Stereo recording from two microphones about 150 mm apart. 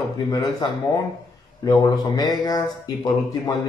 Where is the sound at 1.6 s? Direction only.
25° left (ahead or behind).